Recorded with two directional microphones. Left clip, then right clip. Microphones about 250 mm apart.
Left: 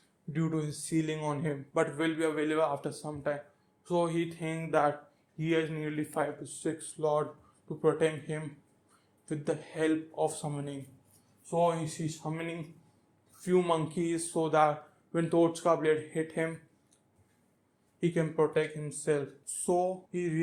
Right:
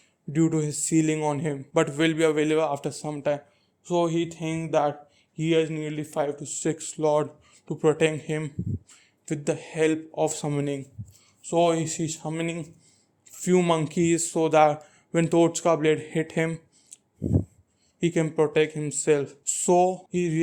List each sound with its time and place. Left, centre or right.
0.3 s speech: right
18.0 s speech: right